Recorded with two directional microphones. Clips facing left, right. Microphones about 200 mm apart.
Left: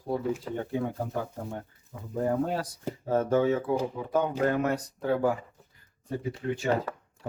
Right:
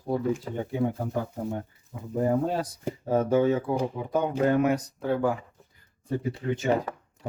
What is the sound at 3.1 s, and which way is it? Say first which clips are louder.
Speech: right 2 dB; 10° right (ahead or behind).